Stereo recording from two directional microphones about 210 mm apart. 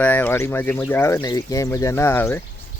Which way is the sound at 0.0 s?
10° left (ahead or behind).